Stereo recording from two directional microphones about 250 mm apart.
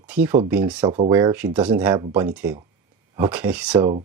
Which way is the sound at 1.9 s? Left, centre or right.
Centre.